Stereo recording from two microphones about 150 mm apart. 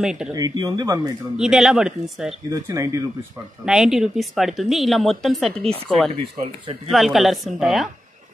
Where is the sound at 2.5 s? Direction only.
20° right (ahead or behind).